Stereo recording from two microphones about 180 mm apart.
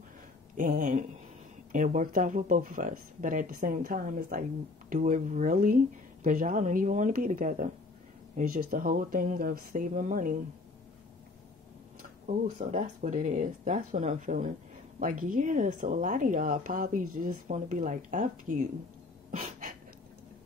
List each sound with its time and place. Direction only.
0.6 s speech: 50° right (ahead or behind)
12.3 s speech: 45° right (ahead or behind)